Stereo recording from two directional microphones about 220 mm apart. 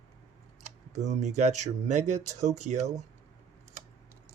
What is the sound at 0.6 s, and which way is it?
Speech, 30° right (ahead or behind).